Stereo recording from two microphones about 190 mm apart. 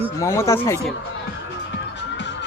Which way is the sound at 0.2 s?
15° left (ahead or behind).